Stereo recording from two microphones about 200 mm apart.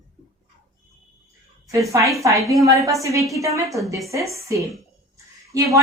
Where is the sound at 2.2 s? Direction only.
15° right (ahead or behind).